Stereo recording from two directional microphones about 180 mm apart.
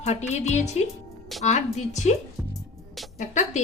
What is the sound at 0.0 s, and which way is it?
Speech, 40° left (ahead or behind).